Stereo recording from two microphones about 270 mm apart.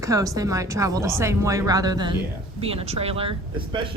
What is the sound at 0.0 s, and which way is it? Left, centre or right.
A woman's voice, centre.